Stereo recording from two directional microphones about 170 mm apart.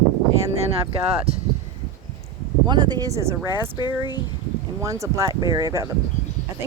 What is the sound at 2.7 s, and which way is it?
Speech, 25° right (ahead or behind).